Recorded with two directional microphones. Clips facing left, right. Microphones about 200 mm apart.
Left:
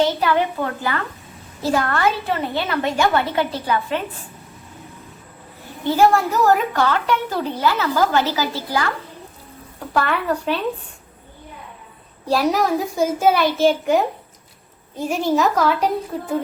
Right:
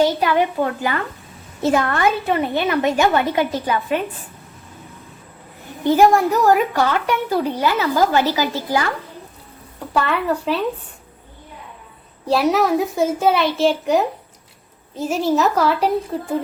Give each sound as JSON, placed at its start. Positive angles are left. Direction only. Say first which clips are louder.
{"t": 0.0, "sound": "a child's voice", "louder": "right 2 dB", "side_deg": -15}
{"t": 5.8, "sound": "a child's voice", "louder": "right 2 dB", "side_deg": -15}
{"t": 9.9, "sound": "a child's voice", "louder": "right 1 dB", "side_deg": 0}
{"t": 12.5, "sound": "a child's voice", "louder": "right 2 dB", "side_deg": 0}